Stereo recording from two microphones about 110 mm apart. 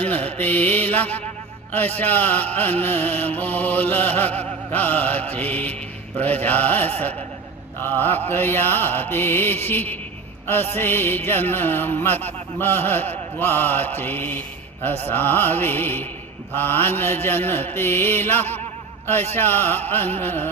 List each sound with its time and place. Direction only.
0.0 s mantra: 15° left (ahead or behind)
2.0 s music: 15° left (ahead or behind)